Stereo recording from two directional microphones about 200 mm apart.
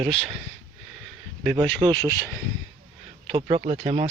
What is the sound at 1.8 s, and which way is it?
Speech, 20° right (ahead or behind).